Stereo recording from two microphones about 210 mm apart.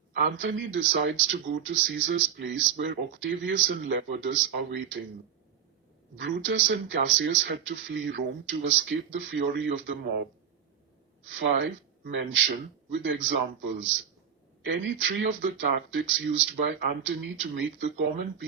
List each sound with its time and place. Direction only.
0.2 s speech: 60° right (ahead or behind)
6.2 s speech: 60° right (ahead or behind)